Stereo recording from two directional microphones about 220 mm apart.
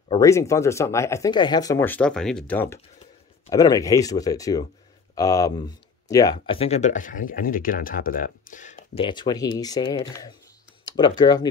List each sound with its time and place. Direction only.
0.1 s speech: 15° left (ahead or behind)